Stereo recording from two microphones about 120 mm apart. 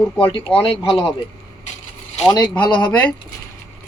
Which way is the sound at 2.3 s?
35° left (ahead or behind).